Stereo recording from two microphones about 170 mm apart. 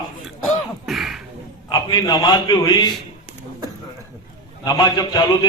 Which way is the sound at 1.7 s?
25° left (ahead or behind).